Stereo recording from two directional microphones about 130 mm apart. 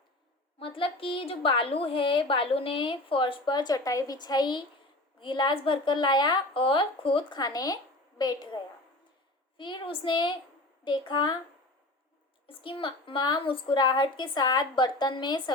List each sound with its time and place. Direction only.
0.6 s a woman's voice: 45° left (ahead or behind)
12.5 s a woman's voice: 45° left (ahead or behind)